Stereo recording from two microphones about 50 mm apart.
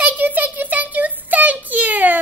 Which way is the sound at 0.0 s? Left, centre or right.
Right.